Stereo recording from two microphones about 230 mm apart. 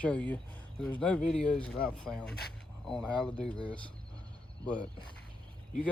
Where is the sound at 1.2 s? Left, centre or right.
Left.